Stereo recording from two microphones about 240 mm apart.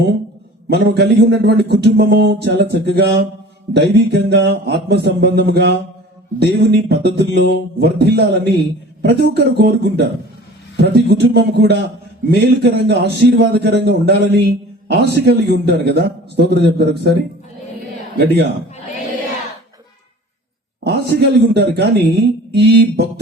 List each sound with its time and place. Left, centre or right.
0.7 s a man's voice: right
20.8 s a man's voice: right